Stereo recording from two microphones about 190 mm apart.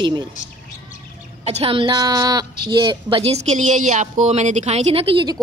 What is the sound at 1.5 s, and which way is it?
A woman's voice, 30° right (ahead or behind).